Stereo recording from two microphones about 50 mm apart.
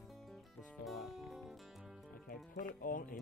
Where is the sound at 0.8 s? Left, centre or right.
Centre.